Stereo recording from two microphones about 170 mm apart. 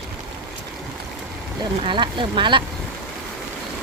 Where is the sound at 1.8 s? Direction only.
30° right (ahead or behind).